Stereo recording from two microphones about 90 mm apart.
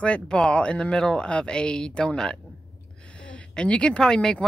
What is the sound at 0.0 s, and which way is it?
Speech, 10° left (ahead or behind).